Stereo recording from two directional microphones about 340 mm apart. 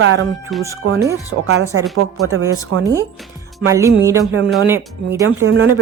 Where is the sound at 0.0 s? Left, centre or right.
Right.